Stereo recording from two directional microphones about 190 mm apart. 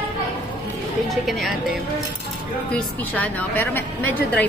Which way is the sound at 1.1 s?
Centre (ahead or behind).